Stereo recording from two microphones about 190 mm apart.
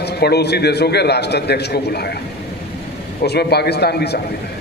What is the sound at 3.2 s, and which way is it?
A man's voice, 60° left (ahead or behind).